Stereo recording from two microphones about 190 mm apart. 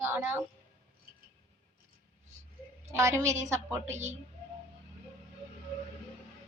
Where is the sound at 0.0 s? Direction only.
15° right (ahead or behind).